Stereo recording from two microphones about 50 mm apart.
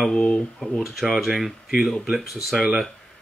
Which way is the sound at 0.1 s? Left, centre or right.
Left.